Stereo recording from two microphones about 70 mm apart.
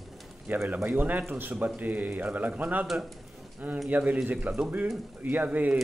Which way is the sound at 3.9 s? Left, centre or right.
Right.